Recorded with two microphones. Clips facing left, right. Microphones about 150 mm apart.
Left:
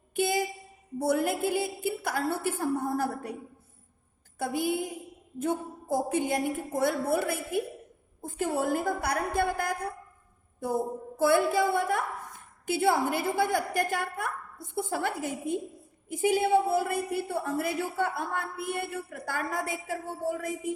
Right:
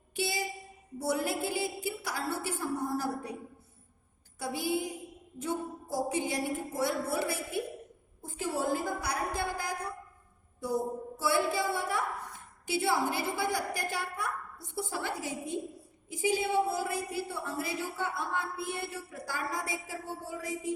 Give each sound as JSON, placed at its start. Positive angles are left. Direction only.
{"t": 0.2, "sound": "a woman's voice", "side_deg": 50}
{"t": 4.4, "sound": "a sound", "side_deg": 55}
{"t": 5.4, "sound": "a woman's voice", "side_deg": 55}